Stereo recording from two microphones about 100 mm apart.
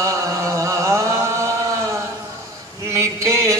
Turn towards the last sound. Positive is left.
turn(degrees=-30)  # may be behind; listen again after turning